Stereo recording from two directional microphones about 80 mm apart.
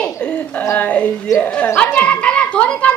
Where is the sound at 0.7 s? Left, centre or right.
Centre.